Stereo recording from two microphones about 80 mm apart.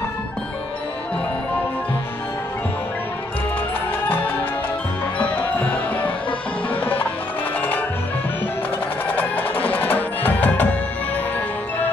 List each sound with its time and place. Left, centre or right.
5.2 s music: centre
9.0 s music: left